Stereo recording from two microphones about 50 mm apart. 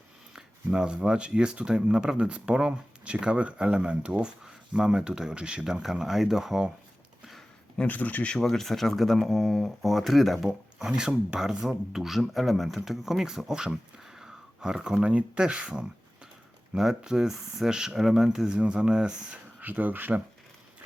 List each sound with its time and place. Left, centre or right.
0.3 s speech: centre
7.9 s speech: left
8.3 s speech: centre
10.8 s speech: centre
15.0 s speech: right
16.7 s speech: centre
19.6 s speech: right